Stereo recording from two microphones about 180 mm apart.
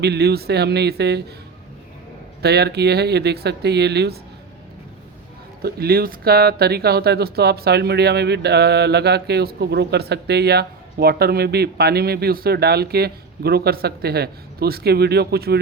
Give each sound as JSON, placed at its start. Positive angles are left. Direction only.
{"t": 0.0, "sound": "speech", "side_deg": -65}
{"t": 2.4, "sound": "speech", "side_deg": -65}
{"t": 5.6, "sound": "speech", "side_deg": -60}